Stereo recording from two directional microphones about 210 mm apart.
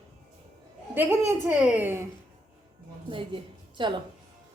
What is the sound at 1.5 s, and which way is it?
Speech, 10° right (ahead or behind).